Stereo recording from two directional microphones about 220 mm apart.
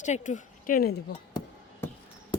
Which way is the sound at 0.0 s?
35° left (ahead or behind).